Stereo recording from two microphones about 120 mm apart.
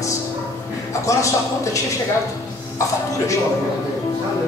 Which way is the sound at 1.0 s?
25° left (ahead or behind).